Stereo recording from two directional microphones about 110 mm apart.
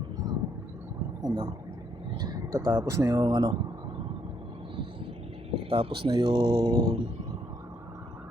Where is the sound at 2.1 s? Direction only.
35° right (ahead or behind).